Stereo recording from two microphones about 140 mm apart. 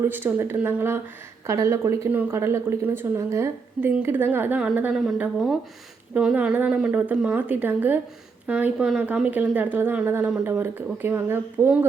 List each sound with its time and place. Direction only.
0.0 s speech: 15° right (ahead or behind)